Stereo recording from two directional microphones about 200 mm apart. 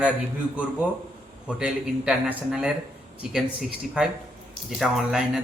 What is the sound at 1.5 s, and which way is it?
Speech, 5° right (ahead or behind).